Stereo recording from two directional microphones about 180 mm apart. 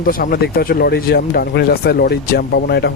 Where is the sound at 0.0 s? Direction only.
55° left (ahead or behind).